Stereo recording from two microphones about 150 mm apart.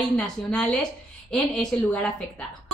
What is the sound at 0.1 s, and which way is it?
A woman's voice, 5° left (ahead or behind).